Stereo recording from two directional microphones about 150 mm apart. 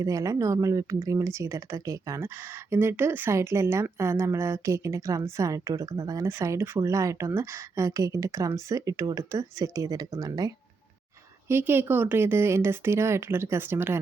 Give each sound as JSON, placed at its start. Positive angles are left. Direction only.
{"t": 0.0, "sound": "speech", "side_deg": -20}
{"t": 11.4, "sound": "speech", "side_deg": -15}